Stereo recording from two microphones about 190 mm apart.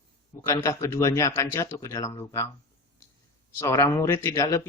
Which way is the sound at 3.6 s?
15° left (ahead or behind).